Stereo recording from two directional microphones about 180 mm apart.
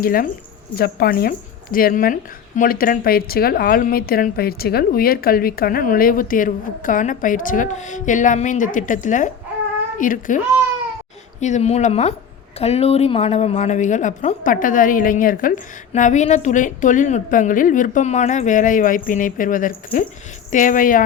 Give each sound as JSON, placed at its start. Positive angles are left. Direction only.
{"t": 0.0, "sound": "a woman's voice", "side_deg": 55}